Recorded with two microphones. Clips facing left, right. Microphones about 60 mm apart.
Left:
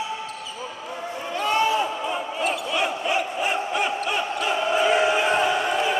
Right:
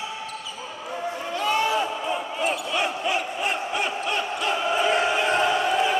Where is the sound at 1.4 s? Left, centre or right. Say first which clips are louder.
Left 2 dB; centre.